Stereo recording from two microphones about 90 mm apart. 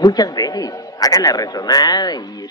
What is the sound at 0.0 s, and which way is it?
Speech, 45° left (ahead or behind).